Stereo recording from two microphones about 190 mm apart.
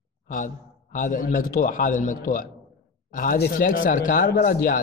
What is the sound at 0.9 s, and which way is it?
A man's voice, 45° left (ahead or behind).